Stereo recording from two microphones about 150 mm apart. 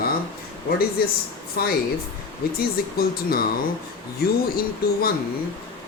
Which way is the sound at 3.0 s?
85° left.